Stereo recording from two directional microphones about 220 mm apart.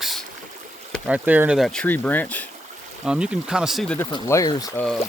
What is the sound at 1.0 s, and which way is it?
Speech, 5° right (ahead or behind).